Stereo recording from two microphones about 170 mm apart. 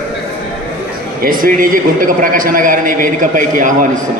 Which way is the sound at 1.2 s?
55° right (ahead or behind).